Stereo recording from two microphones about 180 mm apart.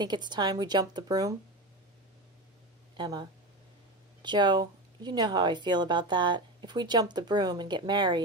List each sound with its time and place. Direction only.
0.0 s speech: 25° right (ahead or behind)
3.0 s speech: 25° right (ahead or behind)